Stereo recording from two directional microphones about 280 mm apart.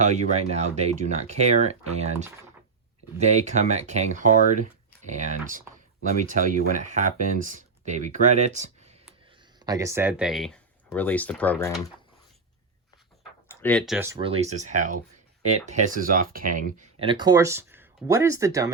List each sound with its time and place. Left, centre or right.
0.0 s speech: right
9.6 s speech: centre
13.5 s speech: centre